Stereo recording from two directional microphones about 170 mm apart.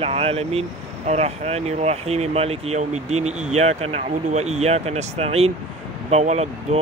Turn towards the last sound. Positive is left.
turn(degrees=-40)  # may be behind; listen again after turning